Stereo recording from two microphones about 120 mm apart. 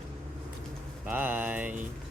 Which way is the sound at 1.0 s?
15° right (ahead or behind).